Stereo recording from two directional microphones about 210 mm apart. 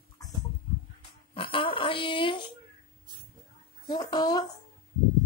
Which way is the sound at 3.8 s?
20° left (ahead or behind).